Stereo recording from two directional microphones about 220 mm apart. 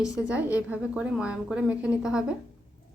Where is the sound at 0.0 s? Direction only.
15° left (ahead or behind).